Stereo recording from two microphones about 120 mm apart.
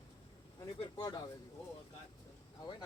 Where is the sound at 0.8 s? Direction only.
35° left (ahead or behind).